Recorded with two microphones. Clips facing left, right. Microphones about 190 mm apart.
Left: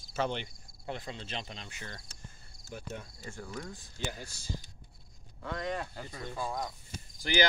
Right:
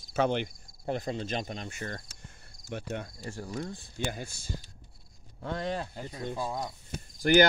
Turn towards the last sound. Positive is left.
turn(degrees=-60)  # may be behind; listen again after turning